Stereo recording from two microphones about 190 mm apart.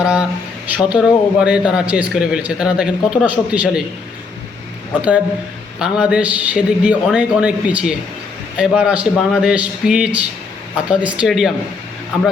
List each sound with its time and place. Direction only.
0.0 s a man's voice: 5° right (ahead or behind)
5.8 s a man's voice: 5° right (ahead or behind)